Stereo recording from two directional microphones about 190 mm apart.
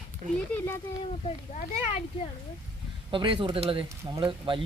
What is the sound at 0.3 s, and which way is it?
Speech, 10° left (ahead or behind).